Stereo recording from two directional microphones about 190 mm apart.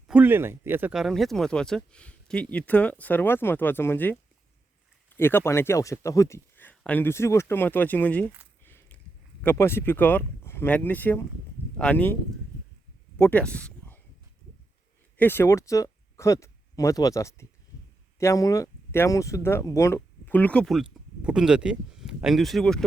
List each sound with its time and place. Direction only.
0.1 s speech: 10° right (ahead or behind); by 8.3 s 10° left (ahead or behind)
8.6 s walk: 10° left (ahead or behind)
9.4 s speech: 10° left (ahead or behind)
13.1 s a sound: 10° left (ahead or behind)
15.2 s speech: 10° left (ahead or behind)